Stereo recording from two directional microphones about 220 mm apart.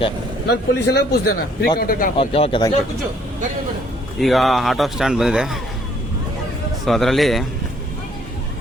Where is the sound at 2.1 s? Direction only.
25° left (ahead or behind).